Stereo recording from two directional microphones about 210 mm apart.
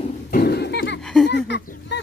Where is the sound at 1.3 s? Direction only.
55° left (ahead or behind).